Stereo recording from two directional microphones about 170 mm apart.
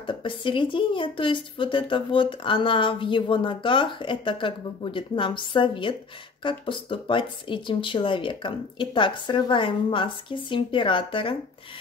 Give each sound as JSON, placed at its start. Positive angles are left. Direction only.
{"t": 0.0, "sound": "speech", "side_deg": 30}